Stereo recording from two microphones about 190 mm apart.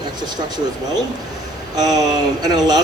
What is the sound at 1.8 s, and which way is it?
Speech, 20° right (ahead or behind).